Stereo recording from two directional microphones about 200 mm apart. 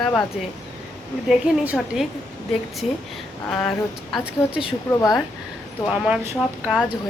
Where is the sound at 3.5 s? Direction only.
5° left (ahead or behind).